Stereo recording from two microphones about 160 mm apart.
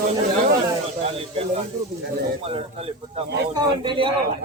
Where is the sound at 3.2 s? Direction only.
90° right.